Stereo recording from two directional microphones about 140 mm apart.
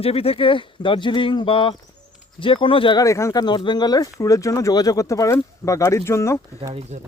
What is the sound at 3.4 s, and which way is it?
Speech, 35° left (ahead or behind).